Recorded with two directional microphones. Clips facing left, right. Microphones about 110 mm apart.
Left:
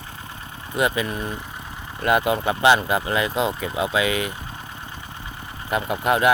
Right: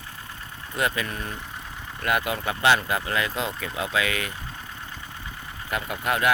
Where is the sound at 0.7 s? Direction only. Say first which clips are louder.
Left 5 dB; 15° left (ahead or behind).